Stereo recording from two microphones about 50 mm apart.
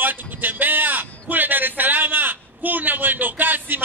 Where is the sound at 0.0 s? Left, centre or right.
Right.